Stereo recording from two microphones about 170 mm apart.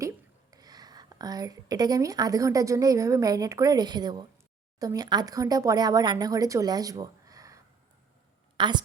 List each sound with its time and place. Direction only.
0.0 s a woman's voice: 20° right (ahead or behind)